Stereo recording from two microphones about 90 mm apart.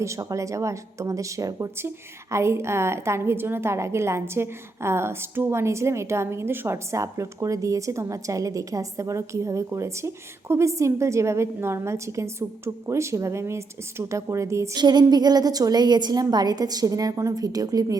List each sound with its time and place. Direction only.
0.0 s a woman's voice: 35° right (ahead or behind)
14.8 s a woman's voice: 55° right (ahead or behind)